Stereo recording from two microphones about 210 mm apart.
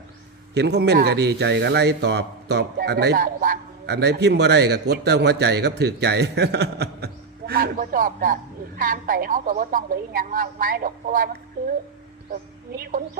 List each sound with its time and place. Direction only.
0.5 s a woman's voice: 50° right (ahead or behind)
12.3 s speech: 40° right (ahead or behind)